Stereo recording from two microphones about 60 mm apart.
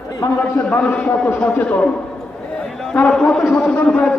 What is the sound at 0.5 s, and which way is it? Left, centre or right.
A man's voice, left.